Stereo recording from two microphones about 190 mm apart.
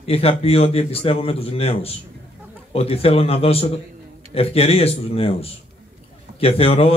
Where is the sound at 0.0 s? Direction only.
30° left (ahead or behind).